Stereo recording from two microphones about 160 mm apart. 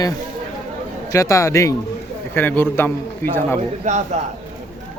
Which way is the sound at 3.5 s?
45° right (ahead or behind).